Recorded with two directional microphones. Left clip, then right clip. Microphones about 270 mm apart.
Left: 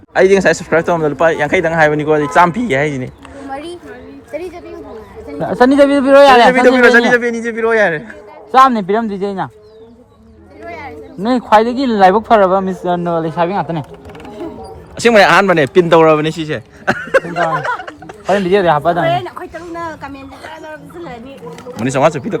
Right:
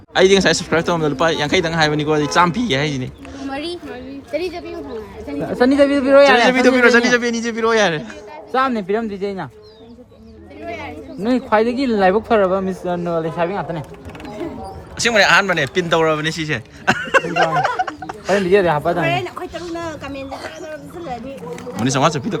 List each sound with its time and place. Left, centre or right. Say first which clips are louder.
0.1 s a man's voice: left 3 dB; centre
3.5 s a sound: left 1 dB; centre
5.5 s speech: left 5 dB; centre
6.5 s a man's voice: left 5 dB; centre
8.5 s speech: left 9 dB; left
11.2 s speech: left 6 dB; centre
14.9 s speech: left 5 dB; centre
16.3 s speech: left 2 dB; centre
18.4 s speech: left 4 dB; centre
20.7 s a sound: even; centre
21.8 s a man's voice: left 4 dB; centre